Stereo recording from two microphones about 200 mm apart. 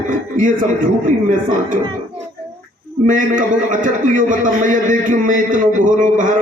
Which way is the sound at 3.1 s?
40° right (ahead or behind).